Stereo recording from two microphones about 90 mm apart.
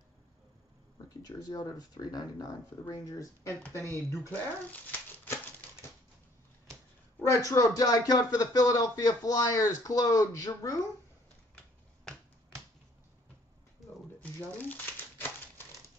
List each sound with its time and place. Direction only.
1.0 s speech: 45° left (ahead or behind)
3.1 s speech: 35° left (ahead or behind)
5.2 s typewriter: 30° left (ahead or behind)
7.2 s speech: 35° left (ahead or behind)
11.5 s typing: 10° left (ahead or behind)
14.2 s crumpling: 20° left (ahead or behind)